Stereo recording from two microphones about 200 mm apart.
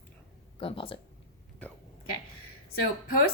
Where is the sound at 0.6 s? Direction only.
25° left (ahead or behind).